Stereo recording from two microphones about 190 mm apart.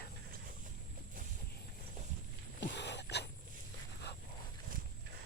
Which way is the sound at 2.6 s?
65° left (ahead or behind).